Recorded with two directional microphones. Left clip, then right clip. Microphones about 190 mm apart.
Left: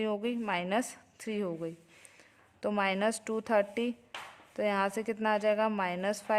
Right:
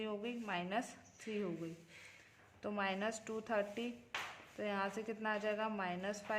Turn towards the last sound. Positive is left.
turn(degrees=45)  # may be behind; listen again after turning